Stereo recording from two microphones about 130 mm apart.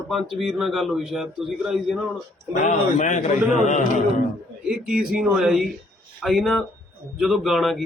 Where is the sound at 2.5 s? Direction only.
65° left (ahead or behind).